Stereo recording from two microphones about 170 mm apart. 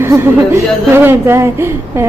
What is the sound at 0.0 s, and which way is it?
Speech, 15° right (ahead or behind).